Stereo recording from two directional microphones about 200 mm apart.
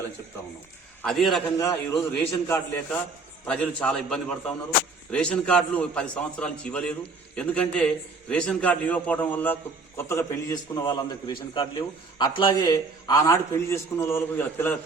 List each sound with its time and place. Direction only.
1.0 s a man's voice: centre (ahead or behind)